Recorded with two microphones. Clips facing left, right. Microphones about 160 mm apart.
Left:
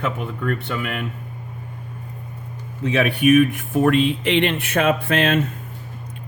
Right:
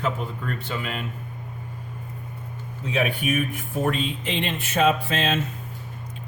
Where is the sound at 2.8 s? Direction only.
75° left (ahead or behind).